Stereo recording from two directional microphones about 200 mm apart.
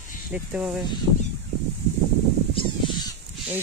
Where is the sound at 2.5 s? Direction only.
25° left (ahead or behind).